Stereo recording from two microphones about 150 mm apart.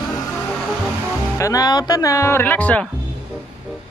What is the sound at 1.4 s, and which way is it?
Speech, 25° left (ahead or behind).